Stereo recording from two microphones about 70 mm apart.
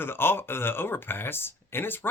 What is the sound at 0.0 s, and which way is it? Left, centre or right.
Speech, left.